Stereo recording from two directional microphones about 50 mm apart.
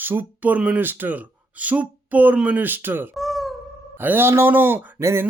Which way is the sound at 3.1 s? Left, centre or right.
Centre.